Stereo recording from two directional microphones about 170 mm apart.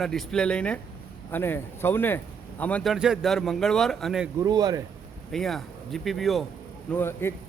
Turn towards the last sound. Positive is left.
turn(degrees=15)  # may be behind; listen again after turning